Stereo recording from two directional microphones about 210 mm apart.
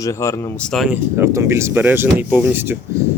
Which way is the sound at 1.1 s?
15° right (ahead or behind).